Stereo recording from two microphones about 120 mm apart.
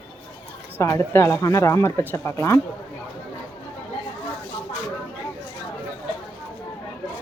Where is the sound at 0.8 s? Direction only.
20° left (ahead or behind).